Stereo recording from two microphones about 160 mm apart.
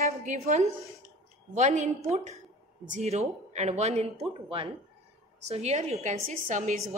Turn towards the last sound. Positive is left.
turn(degrees=-50)  # may be behind; listen again after turning